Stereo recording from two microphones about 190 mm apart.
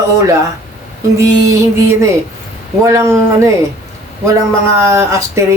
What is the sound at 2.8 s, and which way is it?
Speech, 15° right (ahead or behind).